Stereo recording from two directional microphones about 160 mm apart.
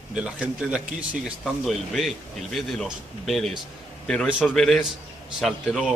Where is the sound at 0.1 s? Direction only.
5° right (ahead or behind).